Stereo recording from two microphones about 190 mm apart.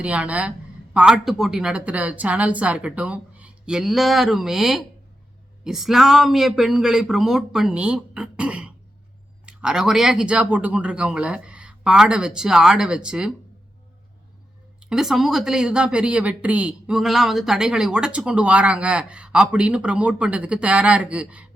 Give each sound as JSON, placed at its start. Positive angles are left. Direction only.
{"t": 0.0, "sound": "a woman's voice", "side_deg": -5}
{"t": 14.8, "sound": "a woman's voice", "side_deg": -5}